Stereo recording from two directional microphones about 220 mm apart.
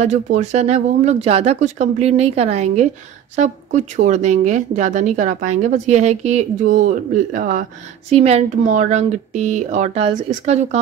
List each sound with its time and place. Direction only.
0.0 s speech: 30° right (ahead or behind)